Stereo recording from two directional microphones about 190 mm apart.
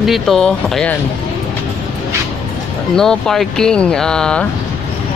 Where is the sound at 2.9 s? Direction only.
5° left (ahead or behind).